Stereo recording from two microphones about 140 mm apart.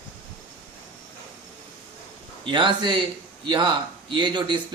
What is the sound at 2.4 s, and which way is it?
A man's voice, 35° right (ahead or behind).